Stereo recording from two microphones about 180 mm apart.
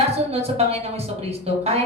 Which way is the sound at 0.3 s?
35° right (ahead or behind).